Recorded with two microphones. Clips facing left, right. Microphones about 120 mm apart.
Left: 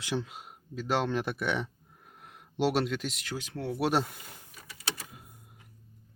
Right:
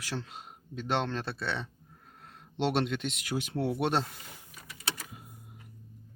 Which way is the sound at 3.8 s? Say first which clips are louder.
Left 4 dB; 5° left (ahead or behind).